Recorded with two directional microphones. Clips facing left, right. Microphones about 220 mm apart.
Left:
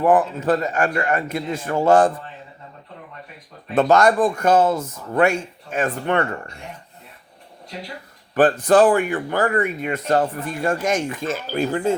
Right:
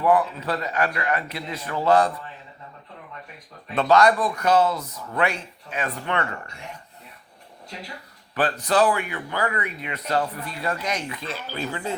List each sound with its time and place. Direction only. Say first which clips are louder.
0.0 s speech: left 4 dB; 45° left (ahead or behind)
3.8 s speech: left 3 dB; 45° left (ahead or behind)
8.4 s speech: left 7 dB; 50° left (ahead or behind)